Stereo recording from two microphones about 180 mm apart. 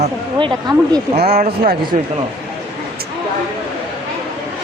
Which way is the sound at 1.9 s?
45° right (ahead or behind).